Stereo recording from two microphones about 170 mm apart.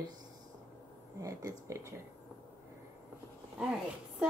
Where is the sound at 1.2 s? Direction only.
20° right (ahead or behind).